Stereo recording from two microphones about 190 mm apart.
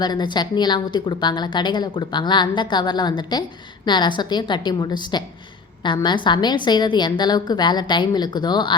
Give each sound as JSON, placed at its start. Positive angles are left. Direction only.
{"t": 0.0, "sound": "a woman's voice", "side_deg": 25}